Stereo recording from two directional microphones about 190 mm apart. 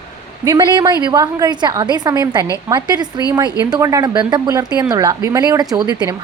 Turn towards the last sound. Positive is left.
turn(degrees=-20)  # may be behind; listen again after turning